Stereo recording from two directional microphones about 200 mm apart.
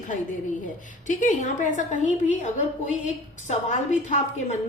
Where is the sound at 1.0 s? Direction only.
40° left (ahead or behind).